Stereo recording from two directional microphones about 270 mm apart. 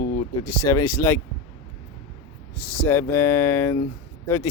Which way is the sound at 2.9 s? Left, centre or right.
Centre.